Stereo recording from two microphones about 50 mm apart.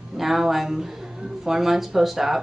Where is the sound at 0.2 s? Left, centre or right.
Centre.